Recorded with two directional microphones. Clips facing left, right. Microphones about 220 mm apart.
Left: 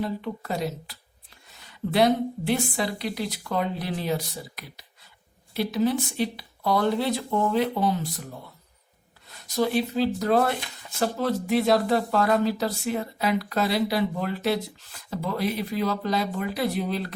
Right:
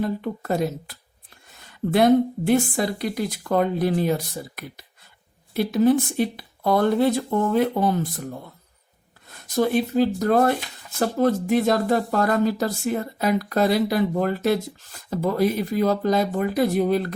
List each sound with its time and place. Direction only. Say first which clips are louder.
0.0 s speech: right 4 dB; 50° right (ahead or behind)
9.2 s speech: right 3 dB; 50° right (ahead or behind)